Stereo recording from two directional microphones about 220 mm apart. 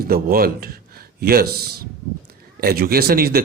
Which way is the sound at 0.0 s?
40° right (ahead or behind).